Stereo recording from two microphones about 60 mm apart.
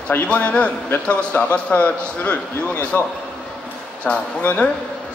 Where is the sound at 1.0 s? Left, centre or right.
Left.